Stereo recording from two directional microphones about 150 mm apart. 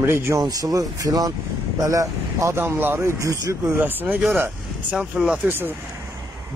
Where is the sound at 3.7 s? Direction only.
10° right (ahead or behind).